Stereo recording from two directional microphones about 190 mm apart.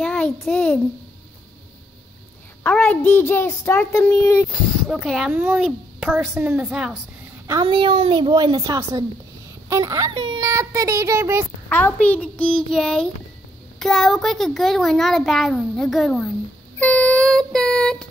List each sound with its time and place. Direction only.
0.0 s a sound: 5° left (ahead or behind)
2.6 s a child's voice: 5° left (ahead or behind)
4.5 s a child's voice: centre (ahead or behind)
7.6 s a woman's voice: 25° right (ahead or behind)
11.7 s a child's voice: 10° left (ahead or behind)